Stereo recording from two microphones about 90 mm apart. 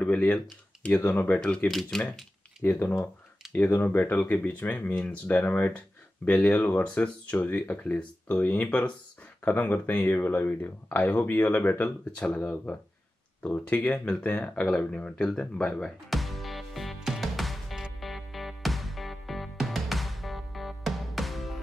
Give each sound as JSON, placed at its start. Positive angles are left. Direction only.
{"t": 0.0, "sound": "speech", "side_deg": 15}
{"t": 1.4, "sound": "speech", "side_deg": 10}
{"t": 2.6, "sound": "speech", "side_deg": 25}
{"t": 12.2, "sound": "speech", "side_deg": 15}
{"t": 13.4, "sound": "speech", "side_deg": 15}
{"t": 16.1, "sound": "music", "side_deg": 0}